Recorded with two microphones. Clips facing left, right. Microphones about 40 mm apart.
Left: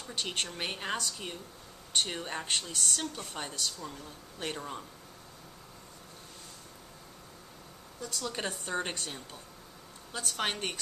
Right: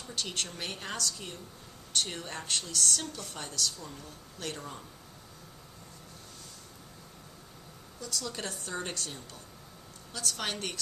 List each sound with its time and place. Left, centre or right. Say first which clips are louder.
0.1 s a woman's voice: left 1 dB; left
8.0 s a woman's voice: left 2 dB; centre